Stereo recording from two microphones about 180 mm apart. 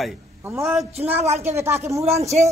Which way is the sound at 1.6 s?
15° right (ahead or behind).